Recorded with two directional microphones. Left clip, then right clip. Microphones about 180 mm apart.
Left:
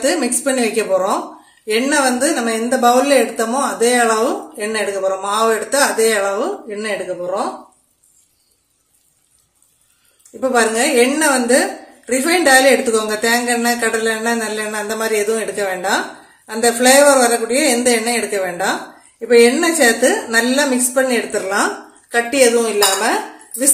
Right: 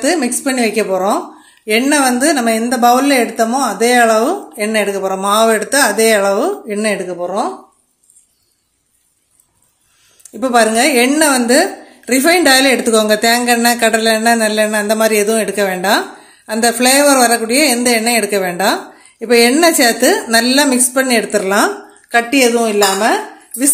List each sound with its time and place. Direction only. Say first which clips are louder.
0.0 s speech: right 2 dB; 35° right (ahead or behind)
10.4 s a woman's voice: right 4 dB; 50° right (ahead or behind)